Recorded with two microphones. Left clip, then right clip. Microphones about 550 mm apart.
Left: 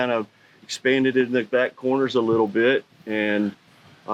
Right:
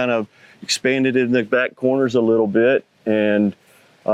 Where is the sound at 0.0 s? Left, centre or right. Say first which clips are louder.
Right 3 dB; right.